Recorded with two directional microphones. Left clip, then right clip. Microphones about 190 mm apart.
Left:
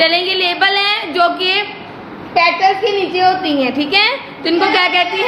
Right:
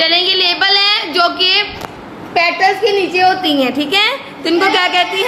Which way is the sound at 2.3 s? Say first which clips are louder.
Even; 20° right (ahead or behind).